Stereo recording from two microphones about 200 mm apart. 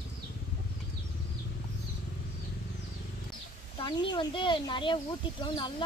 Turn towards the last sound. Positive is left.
turn(degrees=25)  # may be behind; listen again after turning